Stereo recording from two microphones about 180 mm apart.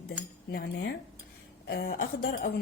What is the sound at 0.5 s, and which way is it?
A woman's voice, 65° left (ahead or behind).